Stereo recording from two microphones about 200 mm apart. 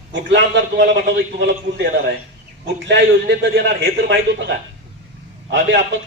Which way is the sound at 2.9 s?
60° right (ahead or behind).